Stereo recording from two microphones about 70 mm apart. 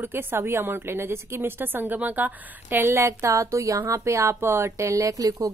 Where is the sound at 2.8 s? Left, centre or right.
Right.